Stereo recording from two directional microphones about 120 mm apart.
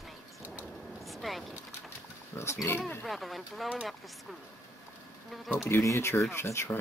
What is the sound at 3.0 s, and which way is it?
Speech, centre (ahead or behind).